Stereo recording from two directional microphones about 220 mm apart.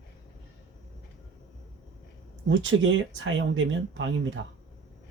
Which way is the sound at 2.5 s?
60° right (ahead or behind).